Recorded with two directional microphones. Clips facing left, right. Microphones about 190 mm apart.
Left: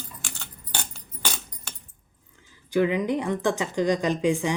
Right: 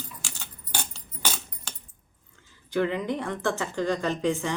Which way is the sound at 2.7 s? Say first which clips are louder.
Left 4 dB; 10° left (ahead or behind).